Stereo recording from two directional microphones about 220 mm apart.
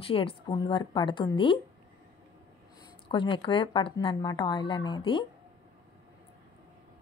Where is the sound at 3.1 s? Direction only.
20° left (ahead or behind).